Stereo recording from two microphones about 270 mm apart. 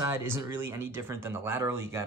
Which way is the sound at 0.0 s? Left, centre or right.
Centre.